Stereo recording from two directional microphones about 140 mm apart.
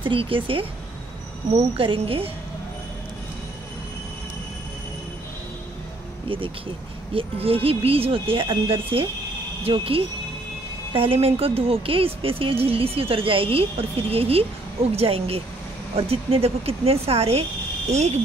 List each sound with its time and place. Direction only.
0.0 s speech: 40° right (ahead or behind)
6.2 s speech: 40° right (ahead or behind)